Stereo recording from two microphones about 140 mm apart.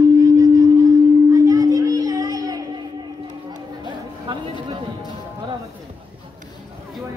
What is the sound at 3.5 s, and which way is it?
Chatter, 35° right (ahead or behind).